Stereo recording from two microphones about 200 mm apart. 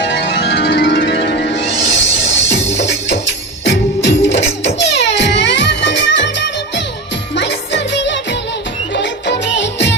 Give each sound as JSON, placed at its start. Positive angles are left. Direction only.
{"t": 0.0, "sound": "music", "side_deg": 60}